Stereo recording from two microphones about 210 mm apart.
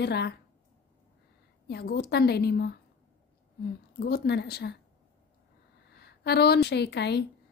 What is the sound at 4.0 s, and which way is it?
Speech, 50° left (ahead or behind).